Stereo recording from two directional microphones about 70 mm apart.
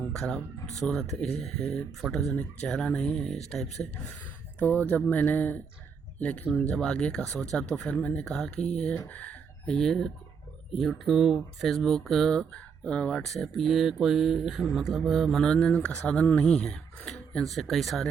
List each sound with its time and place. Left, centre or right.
0.1 s speech: centre
2.3 s speech: centre
4.6 s speech: left
9.0 s a sound: left
9.7 s speech: centre
13.2 s speech: centre
15.6 s speech: centre
17.1 s a sound: centre
17.4 s speech: centre